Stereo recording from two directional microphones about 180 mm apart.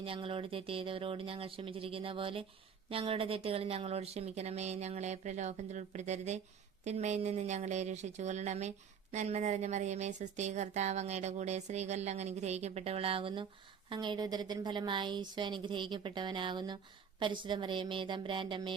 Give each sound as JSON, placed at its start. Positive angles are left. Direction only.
{"t": 0.0, "sound": "a woman's voice", "side_deg": -30}